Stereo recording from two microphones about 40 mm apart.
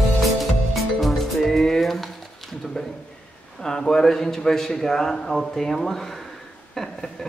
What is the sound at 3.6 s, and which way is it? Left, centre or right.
Speech, centre.